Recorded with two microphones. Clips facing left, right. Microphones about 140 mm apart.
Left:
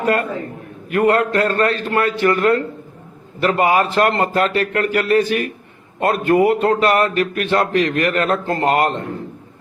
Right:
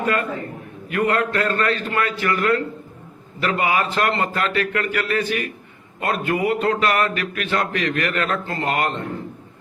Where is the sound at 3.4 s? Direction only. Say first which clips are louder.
Left 5 dB; 45° left (ahead or behind).